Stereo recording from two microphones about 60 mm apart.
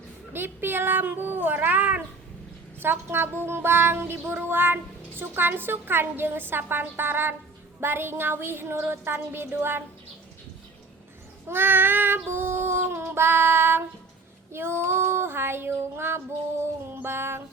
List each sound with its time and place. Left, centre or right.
0.3 s child singing: right
11.4 s child singing: right
16.9 s music: right